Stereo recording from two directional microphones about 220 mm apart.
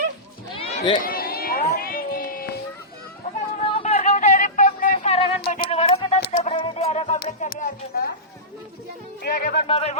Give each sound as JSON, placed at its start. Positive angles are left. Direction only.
{"t": 0.5, "sound": "run", "side_deg": 25}
{"t": 1.0, "sound": "run", "side_deg": 40}
{"t": 1.7, "sound": "a sound", "side_deg": 40}
{"t": 3.6, "sound": "a sound", "side_deg": 25}
{"t": 5.1, "sound": "a sound", "side_deg": 25}
{"t": 6.4, "sound": "music", "side_deg": 25}
{"t": 7.2, "sound": "speech", "side_deg": 40}
{"t": 9.2, "sound": "speech", "side_deg": 45}
{"t": 9.6, "sound": "speech", "side_deg": 25}